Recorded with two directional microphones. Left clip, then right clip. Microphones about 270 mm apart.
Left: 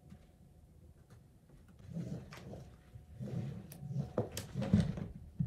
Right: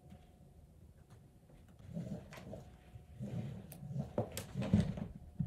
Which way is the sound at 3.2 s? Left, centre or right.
Centre.